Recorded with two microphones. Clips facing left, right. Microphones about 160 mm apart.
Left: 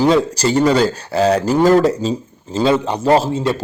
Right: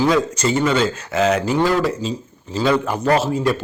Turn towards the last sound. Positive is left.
turn(degrees=25)  # may be behind; listen again after turning